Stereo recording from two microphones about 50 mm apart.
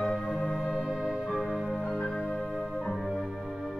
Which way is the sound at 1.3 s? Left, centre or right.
Centre.